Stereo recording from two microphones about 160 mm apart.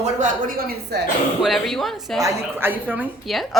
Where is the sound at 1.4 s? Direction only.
Centre (ahead or behind).